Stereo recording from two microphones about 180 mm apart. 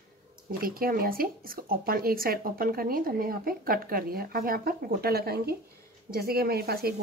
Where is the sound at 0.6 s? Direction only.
55° right (ahead or behind).